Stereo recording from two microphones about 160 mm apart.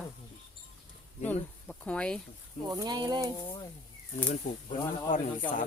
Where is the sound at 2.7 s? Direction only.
25° right (ahead or behind).